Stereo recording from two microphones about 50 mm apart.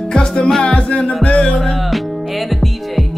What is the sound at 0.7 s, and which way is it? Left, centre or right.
Music, left.